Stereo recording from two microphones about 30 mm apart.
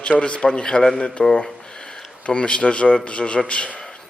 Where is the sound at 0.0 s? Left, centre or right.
Left.